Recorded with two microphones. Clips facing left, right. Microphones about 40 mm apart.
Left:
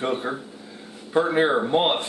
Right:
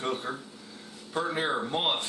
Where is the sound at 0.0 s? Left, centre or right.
Left.